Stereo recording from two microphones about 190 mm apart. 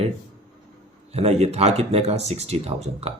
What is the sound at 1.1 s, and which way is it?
Speech, 35° right (ahead or behind).